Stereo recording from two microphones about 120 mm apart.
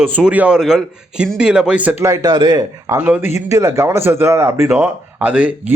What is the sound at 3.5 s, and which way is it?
Speech, 25° right (ahead or behind).